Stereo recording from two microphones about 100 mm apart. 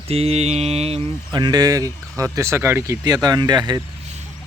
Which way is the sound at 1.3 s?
45° right (ahead or behind).